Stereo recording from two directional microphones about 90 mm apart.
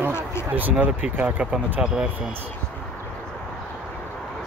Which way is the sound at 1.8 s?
5° right (ahead or behind).